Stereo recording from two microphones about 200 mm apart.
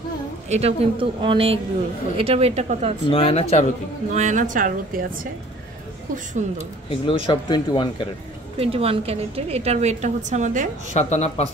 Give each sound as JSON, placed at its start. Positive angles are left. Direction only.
{"t": 0.5, "sound": "a woman's voice", "side_deg": -30}
{"t": 3.1, "sound": "speech", "side_deg": 30}
{"t": 4.1, "sound": "a woman's voice", "side_deg": -35}
{"t": 6.4, "sound": "a woman's voice", "side_deg": -35}
{"t": 6.9, "sound": "speech", "side_deg": 25}
{"t": 8.5, "sound": "a woman's voice", "side_deg": -30}
{"t": 10.9, "sound": "speech", "side_deg": 35}